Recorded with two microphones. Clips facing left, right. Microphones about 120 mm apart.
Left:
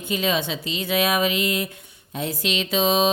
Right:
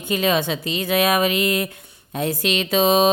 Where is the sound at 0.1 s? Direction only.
55° right (ahead or behind).